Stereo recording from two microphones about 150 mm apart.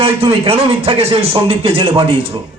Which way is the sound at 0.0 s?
40° right (ahead or behind).